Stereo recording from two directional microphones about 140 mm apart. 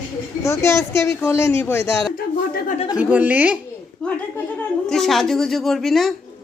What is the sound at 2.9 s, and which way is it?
Speech, 10° right (ahead or behind).